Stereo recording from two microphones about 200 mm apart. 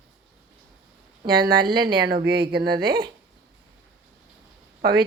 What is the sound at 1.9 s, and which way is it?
Speech, 50° right (ahead or behind).